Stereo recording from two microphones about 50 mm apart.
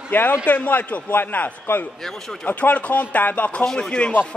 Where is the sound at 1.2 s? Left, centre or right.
Left.